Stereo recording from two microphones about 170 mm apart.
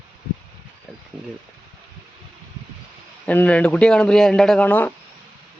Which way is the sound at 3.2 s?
10° left (ahead or behind).